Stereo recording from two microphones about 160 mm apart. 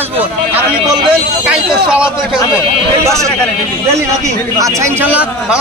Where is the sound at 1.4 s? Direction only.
5° right (ahead or behind).